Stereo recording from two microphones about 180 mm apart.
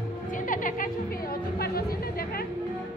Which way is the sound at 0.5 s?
50° left (ahead or behind).